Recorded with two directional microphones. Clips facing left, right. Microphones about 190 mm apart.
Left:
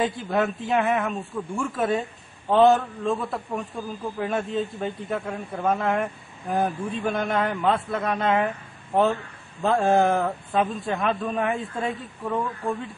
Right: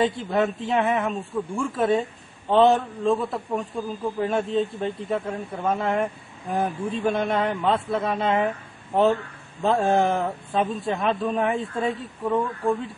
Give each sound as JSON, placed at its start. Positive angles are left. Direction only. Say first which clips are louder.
{"t": 0.6, "sound": "a man's voice", "louder": "even", "side_deg": 0}